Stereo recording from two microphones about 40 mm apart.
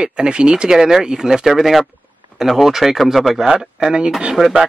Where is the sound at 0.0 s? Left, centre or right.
Right.